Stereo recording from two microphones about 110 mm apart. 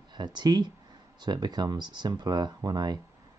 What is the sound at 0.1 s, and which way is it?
Speech, 40° right (ahead or behind).